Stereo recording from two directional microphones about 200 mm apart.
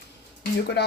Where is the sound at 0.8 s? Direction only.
55° left (ahead or behind).